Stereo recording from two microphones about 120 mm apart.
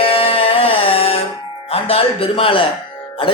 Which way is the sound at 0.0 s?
50° left (ahead or behind).